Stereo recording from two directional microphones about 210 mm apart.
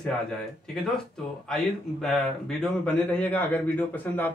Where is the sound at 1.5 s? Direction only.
Centre (ahead or behind).